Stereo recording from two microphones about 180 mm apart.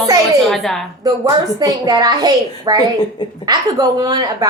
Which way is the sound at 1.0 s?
25° right (ahead or behind).